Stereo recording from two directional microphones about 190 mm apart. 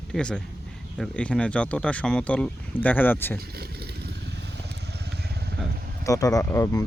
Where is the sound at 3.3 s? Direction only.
55° right (ahead or behind).